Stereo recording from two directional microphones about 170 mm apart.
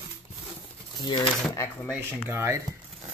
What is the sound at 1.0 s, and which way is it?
Speech, 25° left (ahead or behind).